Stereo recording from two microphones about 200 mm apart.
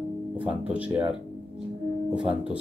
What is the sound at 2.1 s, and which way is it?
Speech, 5° right (ahead or behind).